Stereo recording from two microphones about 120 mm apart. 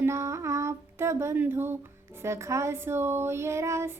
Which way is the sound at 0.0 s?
25° right (ahead or behind).